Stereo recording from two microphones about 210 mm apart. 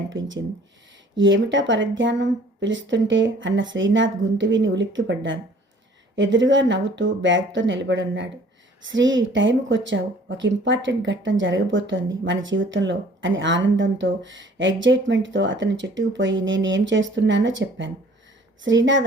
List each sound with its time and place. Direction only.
0.1 s speech: 65° right (ahead or behind)